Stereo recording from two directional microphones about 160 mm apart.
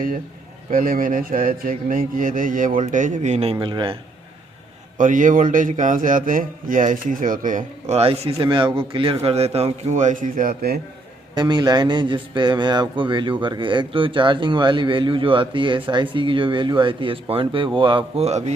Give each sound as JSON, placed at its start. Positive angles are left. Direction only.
{"t": 0.7, "sound": "a man's voice", "side_deg": -60}
{"t": 4.9, "sound": "a man's voice", "side_deg": -55}
{"t": 11.3, "sound": "a man's voice", "side_deg": -25}